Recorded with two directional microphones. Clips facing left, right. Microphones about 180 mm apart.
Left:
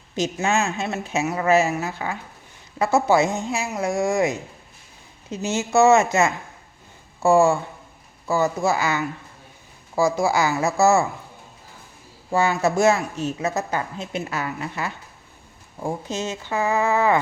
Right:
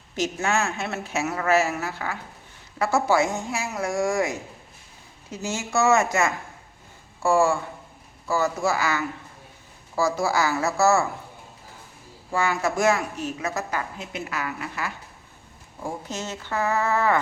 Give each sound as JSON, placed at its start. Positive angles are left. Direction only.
{"t": 0.2, "sound": "a woman's voice", "side_deg": 20}
{"t": 12.3, "sound": "a woman's voice", "side_deg": 25}